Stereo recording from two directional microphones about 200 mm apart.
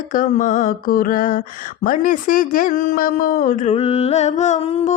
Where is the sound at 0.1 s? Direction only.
40° left (ahead or behind).